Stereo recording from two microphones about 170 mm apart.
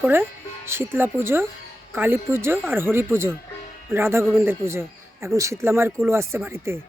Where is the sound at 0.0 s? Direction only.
15° right (ahead or behind).